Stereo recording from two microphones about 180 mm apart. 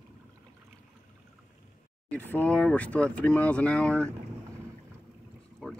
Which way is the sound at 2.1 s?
10° left (ahead or behind).